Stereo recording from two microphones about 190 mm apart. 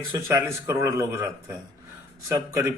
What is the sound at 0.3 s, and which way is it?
Speech, 15° right (ahead or behind).